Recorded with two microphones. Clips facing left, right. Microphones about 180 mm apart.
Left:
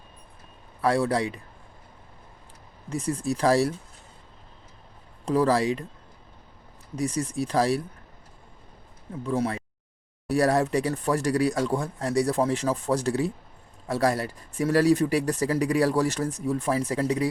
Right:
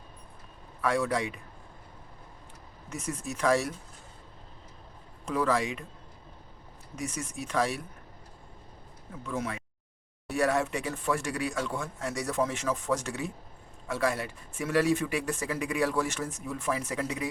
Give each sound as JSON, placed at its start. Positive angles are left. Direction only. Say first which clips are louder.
{"t": 0.8, "sound": "speech", "louder": "left 5 dB", "side_deg": 35}
{"t": 2.9, "sound": "speech", "louder": "left 8 dB", "side_deg": 35}
{"t": 5.2, "sound": "speech", "louder": "left 6 dB", "side_deg": 35}
{"t": 6.9, "sound": "speech", "louder": "left 9 dB", "side_deg": 35}
{"t": 9.2, "sound": "speech", "louder": "left 7 dB", "side_deg": 35}